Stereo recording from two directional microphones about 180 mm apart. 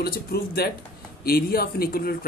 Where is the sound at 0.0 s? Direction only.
60° left (ahead or behind).